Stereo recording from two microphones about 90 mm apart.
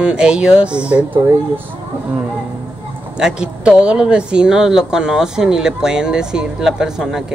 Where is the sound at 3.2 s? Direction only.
10° right (ahead or behind).